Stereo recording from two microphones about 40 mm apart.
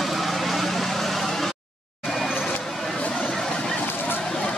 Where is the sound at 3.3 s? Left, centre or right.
Centre.